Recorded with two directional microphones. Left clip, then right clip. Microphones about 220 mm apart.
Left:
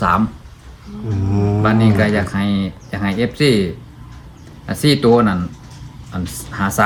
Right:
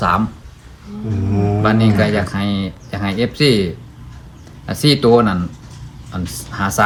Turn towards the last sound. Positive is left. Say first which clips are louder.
# right 1 dB
turn(degrees=5)  # may be behind; listen again after turning